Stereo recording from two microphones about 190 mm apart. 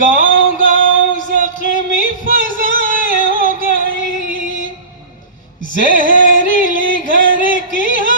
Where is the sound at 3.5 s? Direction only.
40° left (ahead or behind).